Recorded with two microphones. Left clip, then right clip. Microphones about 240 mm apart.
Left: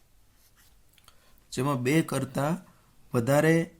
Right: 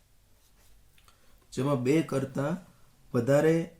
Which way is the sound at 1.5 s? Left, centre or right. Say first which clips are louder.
Even; left.